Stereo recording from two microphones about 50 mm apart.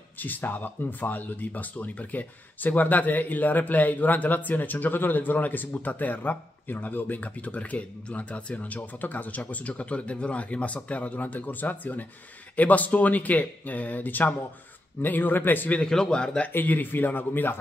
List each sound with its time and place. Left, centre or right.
0.2 s speech: left
15.9 s speech: centre
16.5 s speech: left